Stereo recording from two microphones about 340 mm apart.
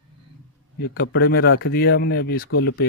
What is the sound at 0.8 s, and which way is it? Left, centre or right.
Speech, left.